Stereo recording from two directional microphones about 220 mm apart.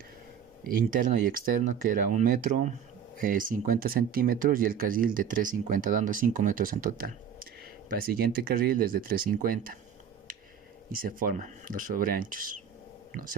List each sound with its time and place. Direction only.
0.6 s speech: 40° right (ahead or behind)
11.2 s speech: 35° right (ahead or behind)